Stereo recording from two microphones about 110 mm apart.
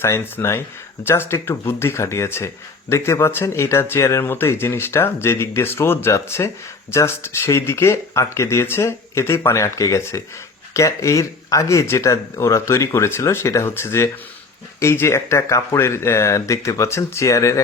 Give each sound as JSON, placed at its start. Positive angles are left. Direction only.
{"t": 0.0, "sound": "speech", "side_deg": 25}